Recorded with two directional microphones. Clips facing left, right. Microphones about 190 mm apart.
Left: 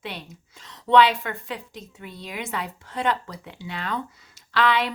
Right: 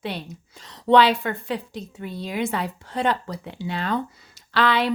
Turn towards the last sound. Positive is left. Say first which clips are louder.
# right 2 dB
turn(degrees=-35)  # may be behind; listen again after turning